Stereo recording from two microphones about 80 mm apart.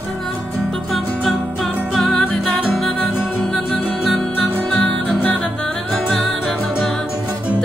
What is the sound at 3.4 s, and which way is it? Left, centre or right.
Music, centre.